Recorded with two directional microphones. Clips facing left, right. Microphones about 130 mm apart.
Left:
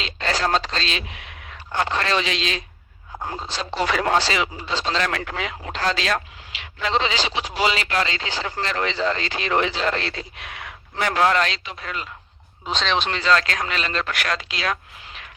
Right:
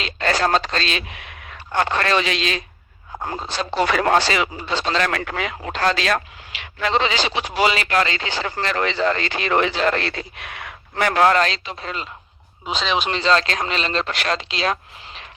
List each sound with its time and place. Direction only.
0.0 s speech: 55° right (ahead or behind)
11.3 s speech: 35° right (ahead or behind)
12.6 s speech: 5° right (ahead or behind)
13.1 s speech: 25° right (ahead or behind)